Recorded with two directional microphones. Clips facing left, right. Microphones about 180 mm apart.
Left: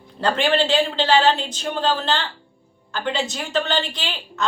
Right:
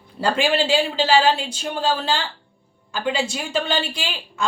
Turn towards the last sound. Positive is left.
turn(degrees=-10)  # may be behind; listen again after turning